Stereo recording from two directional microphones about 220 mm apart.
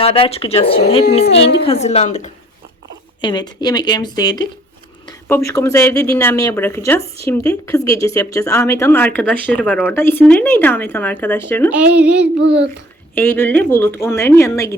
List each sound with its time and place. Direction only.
0.0 s speech: 25° left (ahead or behind)
3.2 s speech: 20° left (ahead or behind)
11.9 s child singing: 5° right (ahead or behind)
12.2 s a child's voice: 55° right (ahead or behind)
13.1 s speech: 10° left (ahead or behind)